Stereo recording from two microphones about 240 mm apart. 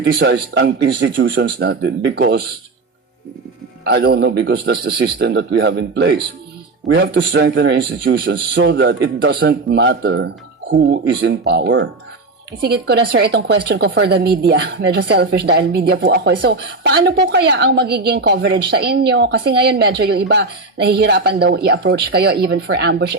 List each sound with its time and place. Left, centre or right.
0.0 s a woman's voice: right
3.8 s a woman's voice: right